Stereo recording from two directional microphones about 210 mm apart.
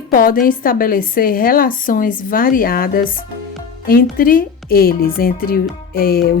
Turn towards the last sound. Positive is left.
turn(degrees=45)  # may be behind; listen again after turning